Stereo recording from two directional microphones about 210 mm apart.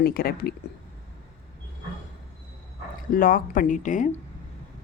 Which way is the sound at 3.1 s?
40° left (ahead or behind).